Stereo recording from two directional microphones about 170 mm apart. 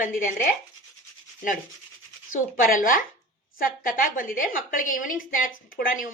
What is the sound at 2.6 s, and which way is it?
A woman's voice, 55° left (ahead or behind).